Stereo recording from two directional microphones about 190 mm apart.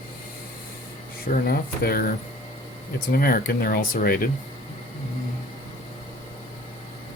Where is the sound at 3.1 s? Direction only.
50° left (ahead or behind).